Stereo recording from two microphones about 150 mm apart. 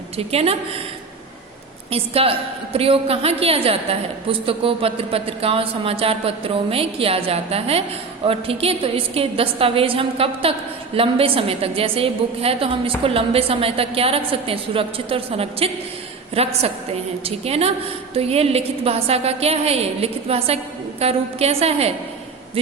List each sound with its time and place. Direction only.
0.2 s a woman's voice: 40° right (ahead or behind)
1.9 s a woman's voice: 40° right (ahead or behind)
22.6 s hoot: 40° right (ahead or behind)